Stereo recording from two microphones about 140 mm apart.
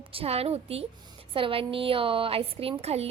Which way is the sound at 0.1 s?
45° right (ahead or behind).